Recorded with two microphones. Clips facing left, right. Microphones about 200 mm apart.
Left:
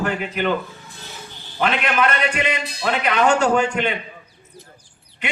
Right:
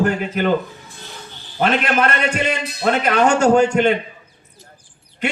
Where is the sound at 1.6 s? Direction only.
40° right (ahead or behind).